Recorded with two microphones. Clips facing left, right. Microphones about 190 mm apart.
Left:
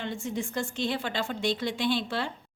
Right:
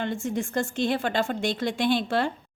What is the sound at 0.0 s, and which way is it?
A woman's voice, 50° right (ahead or behind).